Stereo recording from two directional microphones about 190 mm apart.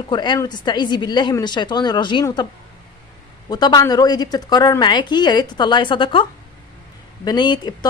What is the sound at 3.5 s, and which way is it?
A woman's voice, 20° left (ahead or behind).